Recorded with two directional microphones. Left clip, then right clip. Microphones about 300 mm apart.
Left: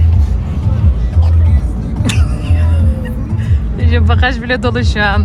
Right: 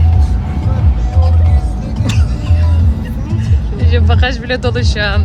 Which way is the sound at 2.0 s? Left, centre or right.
Left.